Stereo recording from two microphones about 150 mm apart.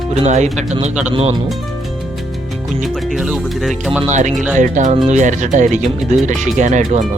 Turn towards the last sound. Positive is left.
turn(degrees=-55)  # may be behind; listen again after turning